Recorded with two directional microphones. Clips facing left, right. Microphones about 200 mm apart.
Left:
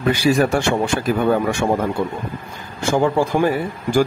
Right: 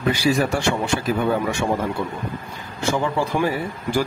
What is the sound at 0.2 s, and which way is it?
Speech, 55° left (ahead or behind).